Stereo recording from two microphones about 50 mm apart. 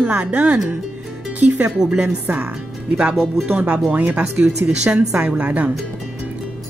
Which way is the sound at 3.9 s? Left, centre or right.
Right.